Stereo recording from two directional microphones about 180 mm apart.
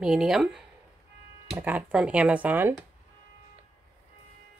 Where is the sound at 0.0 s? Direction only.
5° right (ahead or behind).